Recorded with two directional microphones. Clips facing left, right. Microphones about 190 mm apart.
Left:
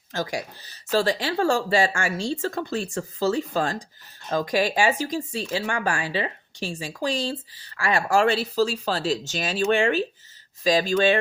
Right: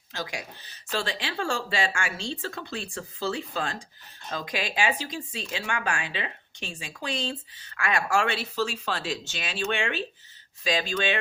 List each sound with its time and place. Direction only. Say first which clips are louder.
0.1 s speech: left 7 dB; 40° left (ahead or behind)